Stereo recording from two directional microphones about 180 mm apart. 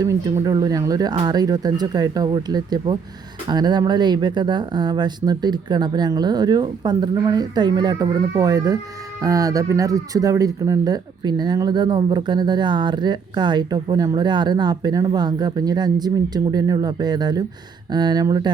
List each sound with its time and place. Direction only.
0.4 s speech: 20° right (ahead or behind)